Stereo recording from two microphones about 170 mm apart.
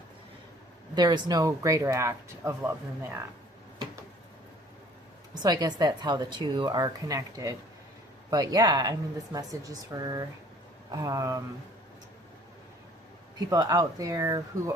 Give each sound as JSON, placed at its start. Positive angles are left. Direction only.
{"t": 0.9, "sound": "speech", "side_deg": -25}
{"t": 5.3, "sound": "a woman's voice", "side_deg": -20}
{"t": 13.5, "sound": "speech", "side_deg": -20}